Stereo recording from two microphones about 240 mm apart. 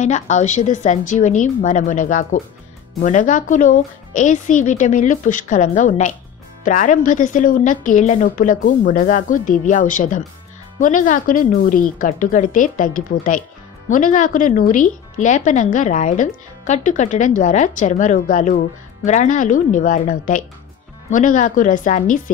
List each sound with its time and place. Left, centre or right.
0.0 s speech: left